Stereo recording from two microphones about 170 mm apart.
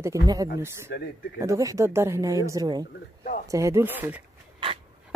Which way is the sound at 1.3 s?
20° right (ahead or behind).